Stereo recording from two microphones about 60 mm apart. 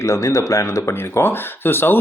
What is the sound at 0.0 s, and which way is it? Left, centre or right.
Speech, left.